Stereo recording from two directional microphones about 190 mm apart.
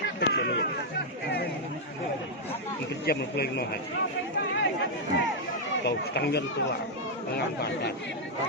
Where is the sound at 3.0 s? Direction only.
55° left (ahead or behind).